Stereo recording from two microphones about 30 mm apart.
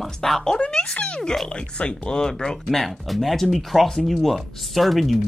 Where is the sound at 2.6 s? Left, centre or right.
Centre.